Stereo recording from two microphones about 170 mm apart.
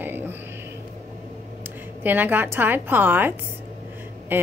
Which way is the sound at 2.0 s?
10° right (ahead or behind).